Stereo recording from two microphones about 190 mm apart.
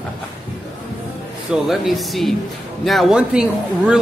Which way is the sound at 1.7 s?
Centre (ahead or behind).